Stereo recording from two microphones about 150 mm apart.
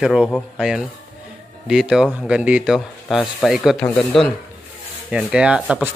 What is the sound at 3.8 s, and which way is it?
Speech, 10° left (ahead or behind).